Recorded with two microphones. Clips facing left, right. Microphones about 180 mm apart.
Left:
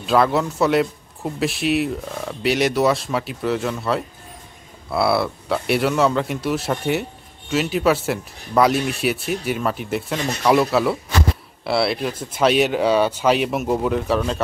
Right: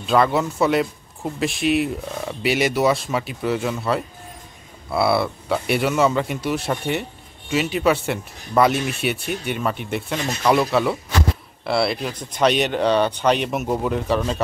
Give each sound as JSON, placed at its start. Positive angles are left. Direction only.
{"t": 0.0, "sound": "speech", "side_deg": 0}